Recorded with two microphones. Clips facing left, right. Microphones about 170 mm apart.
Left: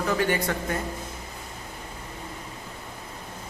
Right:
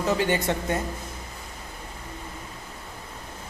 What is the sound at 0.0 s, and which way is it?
Speech, 25° right (ahead or behind).